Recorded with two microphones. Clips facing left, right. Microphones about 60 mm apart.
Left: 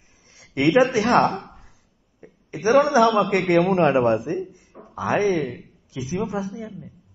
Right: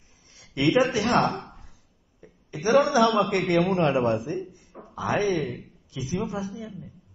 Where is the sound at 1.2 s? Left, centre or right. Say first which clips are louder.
Left 4 dB; left.